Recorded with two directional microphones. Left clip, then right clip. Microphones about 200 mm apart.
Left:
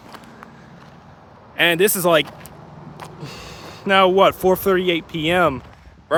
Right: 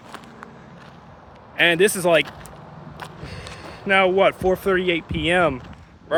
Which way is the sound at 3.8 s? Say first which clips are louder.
Left 3 dB; 25° left (ahead or behind).